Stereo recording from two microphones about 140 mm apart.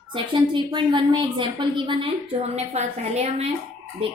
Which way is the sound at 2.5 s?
50° right (ahead or behind).